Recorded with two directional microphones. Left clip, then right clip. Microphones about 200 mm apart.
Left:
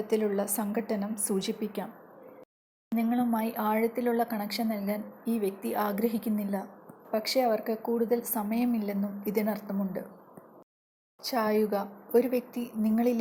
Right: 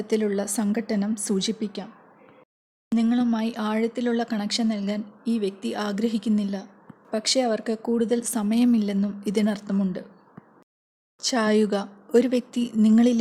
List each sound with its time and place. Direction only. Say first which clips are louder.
0.0 s speech: right 3 dB; 25° right (ahead or behind)
2.9 s speech: right 5 dB; 30° right (ahead or behind)
11.2 s a woman's voice: right 5 dB; 35° right (ahead or behind)